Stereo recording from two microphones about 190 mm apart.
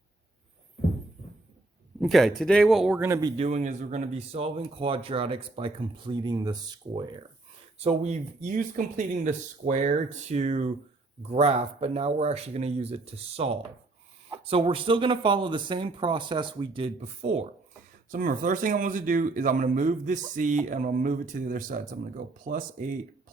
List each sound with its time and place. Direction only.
2.0 s speech: centre (ahead or behind)
3.1 s speech: 20° right (ahead or behind)
7.8 s speech: 35° right (ahead or behind)
18.1 s speech: 45° right (ahead or behind)